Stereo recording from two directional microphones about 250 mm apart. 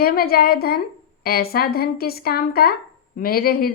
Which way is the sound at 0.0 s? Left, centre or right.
Left.